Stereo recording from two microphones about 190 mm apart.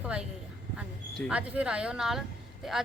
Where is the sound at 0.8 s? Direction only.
5° right (ahead or behind).